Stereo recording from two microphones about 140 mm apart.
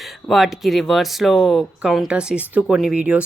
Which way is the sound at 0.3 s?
Centre (ahead or behind).